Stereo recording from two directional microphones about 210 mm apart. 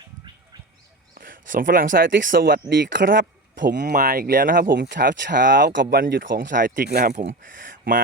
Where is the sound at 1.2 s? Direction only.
40° right (ahead or behind).